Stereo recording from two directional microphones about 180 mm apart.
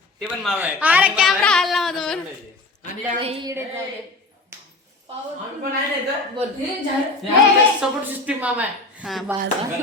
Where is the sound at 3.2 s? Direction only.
30° right (ahead or behind).